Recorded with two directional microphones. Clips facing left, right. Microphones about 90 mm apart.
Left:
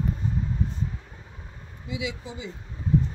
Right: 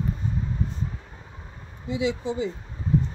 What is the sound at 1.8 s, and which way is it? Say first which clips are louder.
Speech: right 7 dB; 35° right (ahead or behind).